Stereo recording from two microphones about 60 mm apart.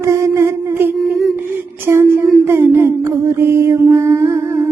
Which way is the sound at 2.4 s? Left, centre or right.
Right.